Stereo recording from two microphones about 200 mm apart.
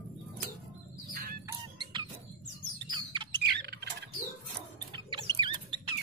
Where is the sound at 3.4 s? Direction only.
55° right (ahead or behind).